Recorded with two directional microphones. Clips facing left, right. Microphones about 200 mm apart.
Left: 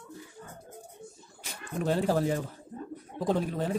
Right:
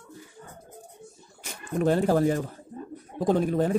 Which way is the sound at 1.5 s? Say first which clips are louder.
Right 5 dB; 55° right (ahead or behind).